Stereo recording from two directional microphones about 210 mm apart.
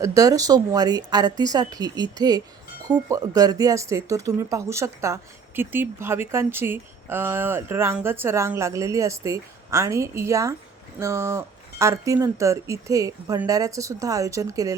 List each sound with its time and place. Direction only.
0.0 s speech: 15° right (ahead or behind)